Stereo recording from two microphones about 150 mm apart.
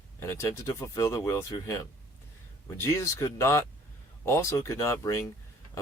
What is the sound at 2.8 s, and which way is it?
Speech, 20° left (ahead or behind).